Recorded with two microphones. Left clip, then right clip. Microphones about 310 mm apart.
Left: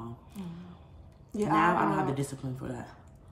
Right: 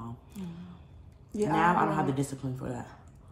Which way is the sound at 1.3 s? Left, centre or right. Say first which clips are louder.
Even; centre.